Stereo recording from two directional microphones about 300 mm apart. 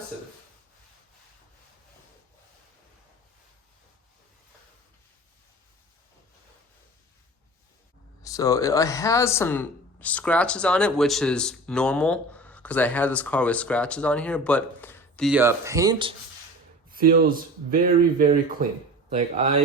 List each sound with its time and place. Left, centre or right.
8.2 s speech: centre
16.9 s speech: right